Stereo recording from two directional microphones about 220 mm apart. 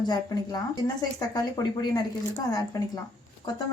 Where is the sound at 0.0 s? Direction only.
20° left (ahead or behind).